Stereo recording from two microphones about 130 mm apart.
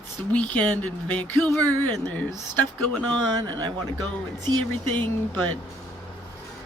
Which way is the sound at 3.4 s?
35° right (ahead or behind).